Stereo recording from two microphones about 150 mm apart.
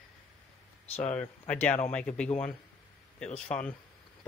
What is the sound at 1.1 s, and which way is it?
Speech, 10° left (ahead or behind).